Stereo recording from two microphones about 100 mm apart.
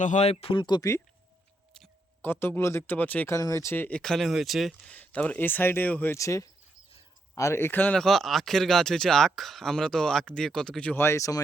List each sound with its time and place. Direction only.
0.2 s speech: 90° left
0.6 s speech: 45° left (ahead or behind)
2.2 s speech: 20° left (ahead or behind)
3.3 s speech: 30° left (ahead or behind)
3.9 s speech: 5° left (ahead or behind)
4.9 s speech: 15° left (ahead or behind)
6.1 s speech: 30° left (ahead or behind)
7.9 s speech: 5° left (ahead or behind)
10.9 s speech: 25° left (ahead or behind)